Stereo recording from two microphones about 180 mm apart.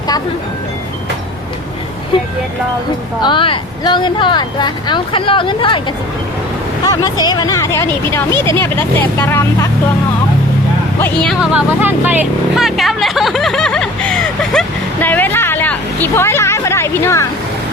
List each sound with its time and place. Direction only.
3.2 s speech: 25° left (ahead or behind)
6.8 s speech: 20° left (ahead or behind)
11.0 s speech: 5° left (ahead or behind)
11.8 s speech: 10° right (ahead or behind)
15.0 s a sound: 10° left (ahead or behind)